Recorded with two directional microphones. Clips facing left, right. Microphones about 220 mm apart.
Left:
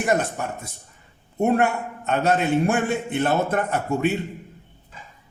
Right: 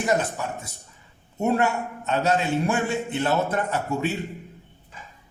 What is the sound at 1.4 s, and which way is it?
A man's voice, 55° left (ahead or behind).